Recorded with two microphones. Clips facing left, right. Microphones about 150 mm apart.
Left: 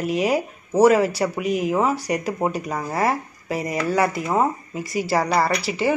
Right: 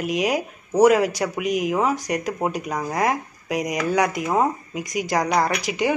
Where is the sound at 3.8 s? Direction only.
5° left (ahead or behind).